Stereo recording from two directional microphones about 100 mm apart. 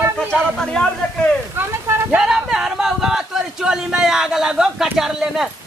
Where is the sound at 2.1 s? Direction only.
5° right (ahead or behind).